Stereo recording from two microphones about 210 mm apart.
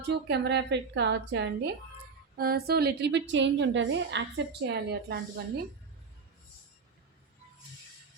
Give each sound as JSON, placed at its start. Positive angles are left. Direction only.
{"t": 0.1, "sound": "a woman's voice", "side_deg": -55}